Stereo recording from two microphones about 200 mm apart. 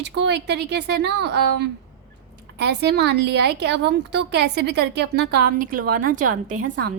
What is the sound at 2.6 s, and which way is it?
A man's voice, 55° right (ahead or behind).